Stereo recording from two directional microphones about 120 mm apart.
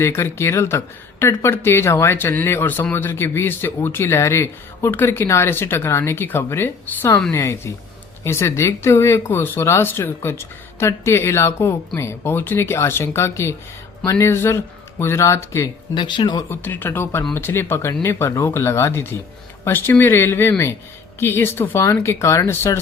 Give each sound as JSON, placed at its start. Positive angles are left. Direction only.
{"t": 0.0, "sound": "speech", "side_deg": 20}
{"t": 16.0, "sound": "speech", "side_deg": 40}
{"t": 16.5, "sound": "speech", "side_deg": 15}